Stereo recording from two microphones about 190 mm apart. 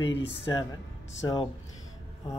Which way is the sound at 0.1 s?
70° left (ahead or behind).